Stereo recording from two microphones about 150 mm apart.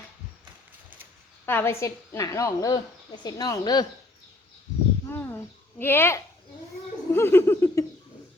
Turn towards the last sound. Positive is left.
turn(degrees=20)  # may be behind; listen again after turning